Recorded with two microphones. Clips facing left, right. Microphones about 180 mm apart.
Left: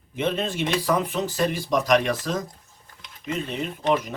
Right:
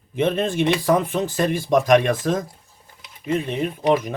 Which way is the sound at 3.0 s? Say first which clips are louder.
Right 6 dB; 10° right (ahead or behind).